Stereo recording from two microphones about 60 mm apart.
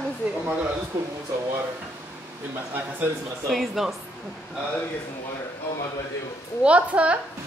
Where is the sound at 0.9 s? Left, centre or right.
Right.